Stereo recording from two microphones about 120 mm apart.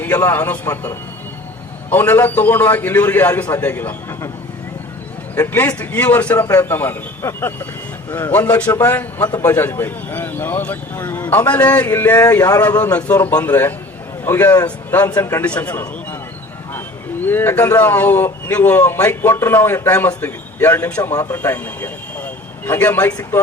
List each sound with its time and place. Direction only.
0.0 s a man's voice: 25° left (ahead or behind)
1.9 s a man's voice: 15° left (ahead or behind)
5.3 s a man's voice: 15° left (ahead or behind)
12.4 s a man's voice: 30° left (ahead or behind)
13.1 s a man's voice: 15° left (ahead or behind)
15.4 s a man's voice: 10° left (ahead or behind)
17.2 s a man's voice: 15° left (ahead or behind)